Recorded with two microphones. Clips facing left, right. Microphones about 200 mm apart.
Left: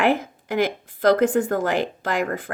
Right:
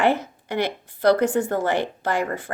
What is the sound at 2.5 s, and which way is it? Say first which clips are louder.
Speech: right 1 dB; 60° left (ahead or behind).